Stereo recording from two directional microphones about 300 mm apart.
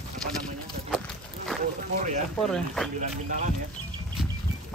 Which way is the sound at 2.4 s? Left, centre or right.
Centre.